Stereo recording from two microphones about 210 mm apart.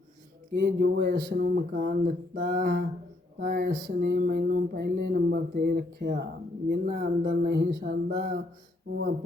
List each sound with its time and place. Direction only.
0.5 s mantra: 50° right (ahead or behind)